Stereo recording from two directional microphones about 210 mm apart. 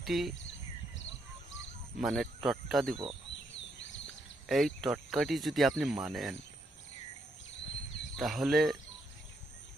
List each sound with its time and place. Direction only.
0.0 s speech: centre (ahead or behind)
2.0 s speech: centre (ahead or behind)
2.9 s speech: 25° right (ahead or behind)
4.4 s speech: centre (ahead or behind)
8.1 s speech: centre (ahead or behind)